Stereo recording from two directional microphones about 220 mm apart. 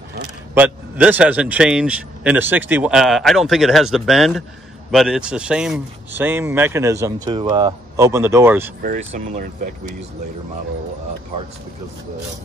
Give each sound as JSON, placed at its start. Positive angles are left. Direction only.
{"t": 0.6, "sound": "a man's voice", "side_deg": -5}
{"t": 8.8, "sound": "speech", "side_deg": -30}